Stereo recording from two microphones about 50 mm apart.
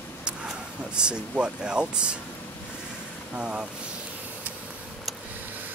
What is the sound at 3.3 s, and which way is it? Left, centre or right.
Speech, centre.